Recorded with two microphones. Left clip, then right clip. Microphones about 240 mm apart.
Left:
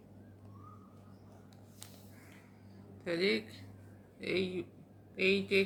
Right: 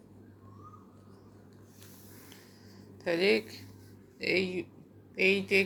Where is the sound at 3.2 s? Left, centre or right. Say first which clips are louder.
Right 6 dB; centre.